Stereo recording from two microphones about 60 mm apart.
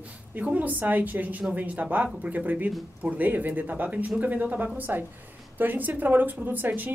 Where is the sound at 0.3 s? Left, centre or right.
Right.